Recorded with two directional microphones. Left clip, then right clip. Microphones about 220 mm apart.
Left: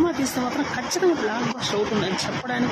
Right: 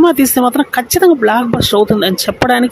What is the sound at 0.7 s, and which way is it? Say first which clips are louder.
Speech: right 10 dB; 45° right (ahead or behind).